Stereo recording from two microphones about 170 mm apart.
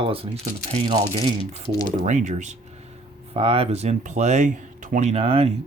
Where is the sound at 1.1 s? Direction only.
35° right (ahead or behind).